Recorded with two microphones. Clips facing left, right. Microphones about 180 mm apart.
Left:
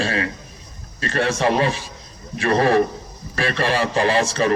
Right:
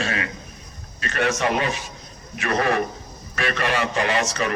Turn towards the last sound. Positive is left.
turn(degrees=30)  # may be behind; listen again after turning